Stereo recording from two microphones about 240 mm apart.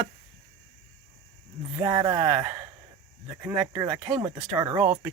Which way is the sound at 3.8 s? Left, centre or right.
Centre.